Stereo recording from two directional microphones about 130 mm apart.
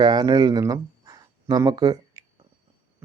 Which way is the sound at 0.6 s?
30° right (ahead or behind).